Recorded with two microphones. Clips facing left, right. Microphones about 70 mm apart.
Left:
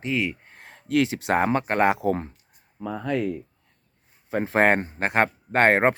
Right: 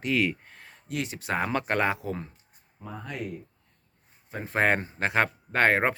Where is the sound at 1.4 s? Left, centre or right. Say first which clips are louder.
Left 3 dB; left.